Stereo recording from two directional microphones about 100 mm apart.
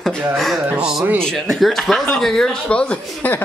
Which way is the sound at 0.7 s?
5° right (ahead or behind).